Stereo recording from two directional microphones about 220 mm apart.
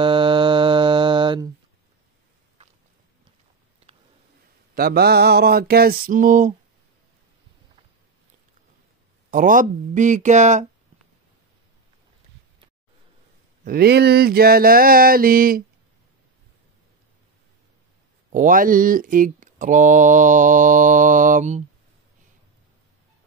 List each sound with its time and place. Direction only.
0.0 s mantra: 25° right (ahead or behind)
3.9 s a sound: 25° right (ahead or behind)
4.7 s mantra: 45° right (ahead or behind)
9.3 s mantra: 40° right (ahead or behind)
13.7 s mantra: 45° right (ahead or behind)
18.3 s mantra: 35° right (ahead or behind)